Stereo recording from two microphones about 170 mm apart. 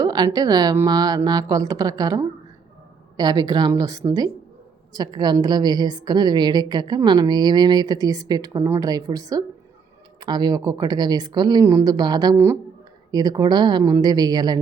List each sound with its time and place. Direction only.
0.0 s a woman's voice: 20° right (ahead or behind)